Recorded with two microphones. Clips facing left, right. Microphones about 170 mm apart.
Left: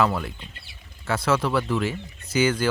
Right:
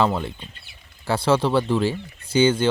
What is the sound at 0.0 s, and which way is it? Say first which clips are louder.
Speech: right 2 dB; 25° right (ahead or behind).